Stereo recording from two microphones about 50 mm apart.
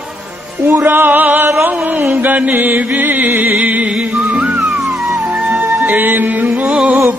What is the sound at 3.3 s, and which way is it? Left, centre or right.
Music, right.